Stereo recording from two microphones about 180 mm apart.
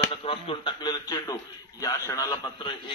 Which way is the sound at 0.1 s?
30° left (ahead or behind).